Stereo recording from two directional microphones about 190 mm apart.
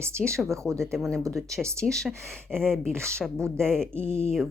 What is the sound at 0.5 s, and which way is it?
Speech, 15° right (ahead or behind).